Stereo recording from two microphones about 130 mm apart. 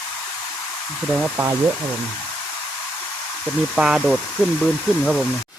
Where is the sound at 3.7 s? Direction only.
5° right (ahead or behind).